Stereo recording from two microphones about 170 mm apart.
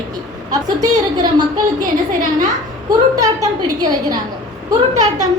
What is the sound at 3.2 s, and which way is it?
A woman's voice, 20° right (ahead or behind).